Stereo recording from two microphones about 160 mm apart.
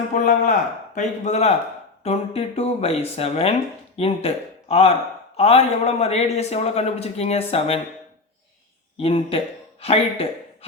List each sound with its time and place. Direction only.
0.1 s a man's voice: 50° left (ahead or behind)
9.0 s a man's voice: 35° left (ahead or behind)